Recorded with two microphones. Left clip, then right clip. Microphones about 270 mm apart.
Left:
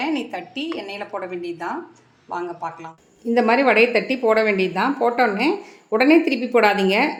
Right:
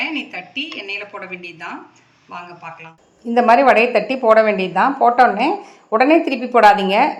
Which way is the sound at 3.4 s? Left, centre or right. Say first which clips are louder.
Right 4 dB; centre.